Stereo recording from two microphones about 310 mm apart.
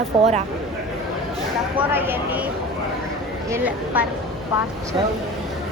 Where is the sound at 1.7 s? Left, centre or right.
Centre.